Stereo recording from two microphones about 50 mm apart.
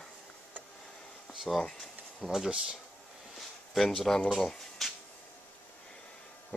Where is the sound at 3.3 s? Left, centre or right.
Centre.